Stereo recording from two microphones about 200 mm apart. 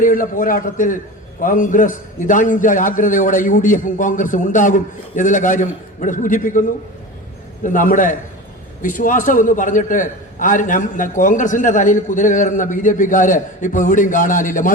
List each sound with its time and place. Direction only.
0.0 s a man's voice: 40° left (ahead or behind)